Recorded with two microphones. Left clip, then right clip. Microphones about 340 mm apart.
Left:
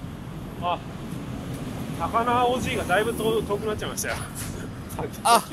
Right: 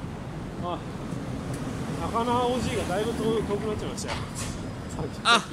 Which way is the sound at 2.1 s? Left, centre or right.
Left.